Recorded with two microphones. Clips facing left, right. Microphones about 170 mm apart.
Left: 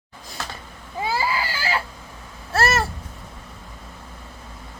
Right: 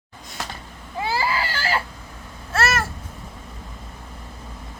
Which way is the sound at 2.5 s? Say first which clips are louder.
Left 2 dB; 30° left (ahead or behind).